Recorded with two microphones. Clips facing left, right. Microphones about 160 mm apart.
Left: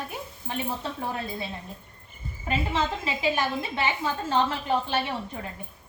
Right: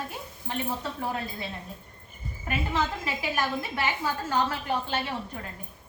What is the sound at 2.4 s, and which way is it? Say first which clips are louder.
A woman's voice: left 2 dB; 20° left (ahead or behind).